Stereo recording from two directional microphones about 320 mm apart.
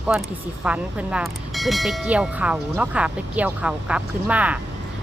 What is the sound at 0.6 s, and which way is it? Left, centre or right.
Speech, centre.